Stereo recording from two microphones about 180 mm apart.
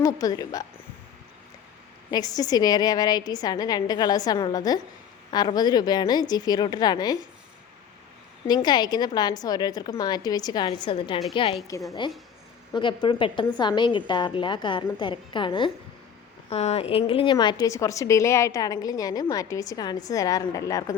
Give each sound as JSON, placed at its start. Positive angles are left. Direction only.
{"t": 0.0, "sound": "a woman's voice", "side_deg": 20}
{"t": 2.0, "sound": "a woman's voice", "side_deg": 20}
{"t": 8.4, "sound": "a woman's voice", "side_deg": 25}